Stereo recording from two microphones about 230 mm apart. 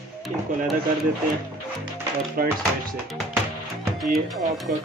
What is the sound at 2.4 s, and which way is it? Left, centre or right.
Speech, right.